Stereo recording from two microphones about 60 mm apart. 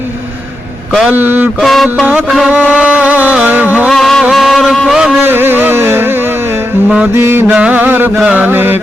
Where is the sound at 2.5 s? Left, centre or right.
Right.